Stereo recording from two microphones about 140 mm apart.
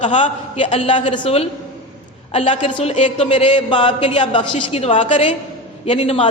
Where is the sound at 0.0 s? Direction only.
55° left (ahead or behind).